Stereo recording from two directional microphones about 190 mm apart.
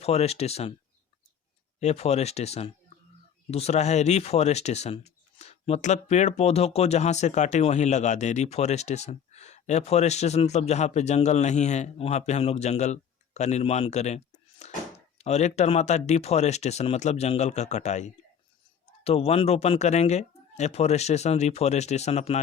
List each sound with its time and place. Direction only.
0.0 s speech: 35° left (ahead or behind)
1.8 s speech: 35° left (ahead or behind)
14.6 s a sound: 35° left (ahead or behind)
15.2 s speech: 35° left (ahead or behind)